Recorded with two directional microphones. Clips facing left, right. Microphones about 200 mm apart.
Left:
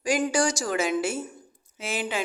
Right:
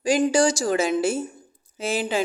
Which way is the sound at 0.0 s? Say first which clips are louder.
Right 5 dB; 30° right (ahead or behind).